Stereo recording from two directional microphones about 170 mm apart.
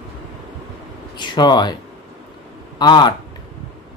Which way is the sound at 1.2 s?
25° left (ahead or behind).